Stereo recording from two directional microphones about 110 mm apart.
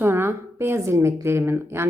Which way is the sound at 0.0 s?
20° right (ahead or behind).